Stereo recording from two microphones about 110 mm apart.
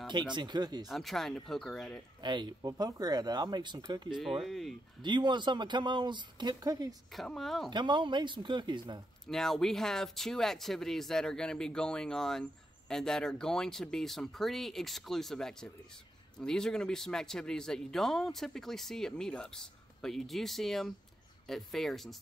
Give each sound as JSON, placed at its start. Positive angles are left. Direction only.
{"t": 0.0, "sound": "speech", "side_deg": -45}
{"t": 0.8, "sound": "speech", "side_deg": 0}
{"t": 2.2, "sound": "speech", "side_deg": -40}
{"t": 4.4, "sound": "speech", "side_deg": 0}
{"t": 5.0, "sound": "speech", "side_deg": -45}
{"t": 7.2, "sound": "speech", "side_deg": 0}
{"t": 7.7, "sound": "speech", "side_deg": -45}
{"t": 9.3, "sound": "speech", "side_deg": 5}